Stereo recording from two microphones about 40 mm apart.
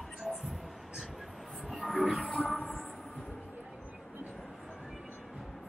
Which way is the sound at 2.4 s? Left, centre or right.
Left.